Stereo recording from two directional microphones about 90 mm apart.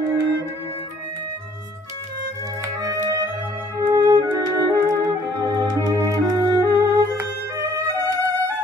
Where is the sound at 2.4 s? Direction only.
40° right (ahead or behind).